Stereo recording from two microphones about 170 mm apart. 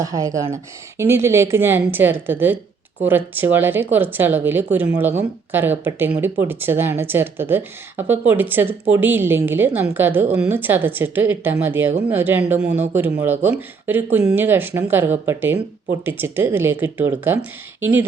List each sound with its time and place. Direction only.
0.0 s speech: 20° right (ahead or behind)